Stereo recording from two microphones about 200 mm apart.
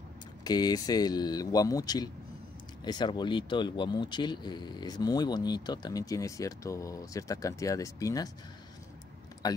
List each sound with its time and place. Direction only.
0.4 s speech: 20° left (ahead or behind)